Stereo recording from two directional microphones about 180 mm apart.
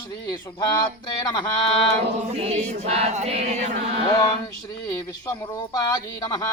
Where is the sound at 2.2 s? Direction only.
40° right (ahead or behind).